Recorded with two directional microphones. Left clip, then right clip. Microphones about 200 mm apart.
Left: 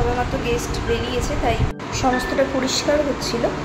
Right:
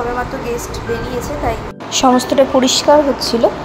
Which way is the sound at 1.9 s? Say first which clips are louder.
Right 8 dB; 35° right (ahead or behind).